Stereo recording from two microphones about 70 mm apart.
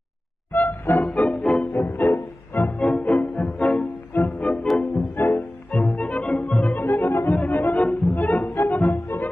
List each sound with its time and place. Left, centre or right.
0.5 s music: left
1.1 s music: centre
1.7 s music: left
2.8 s music: centre
5.2 s music: left
5.7 s music: centre